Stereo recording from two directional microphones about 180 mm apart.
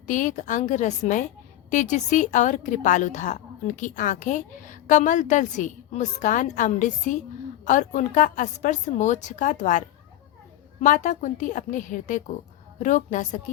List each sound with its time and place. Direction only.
0.1 s a woman's voice: 45° left (ahead or behind)